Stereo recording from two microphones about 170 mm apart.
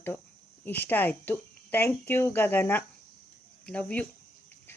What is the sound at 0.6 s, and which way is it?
Speech, 10° left (ahead or behind).